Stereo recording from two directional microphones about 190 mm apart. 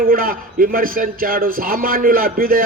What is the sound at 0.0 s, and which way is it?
A man's voice, 50° right (ahead or behind).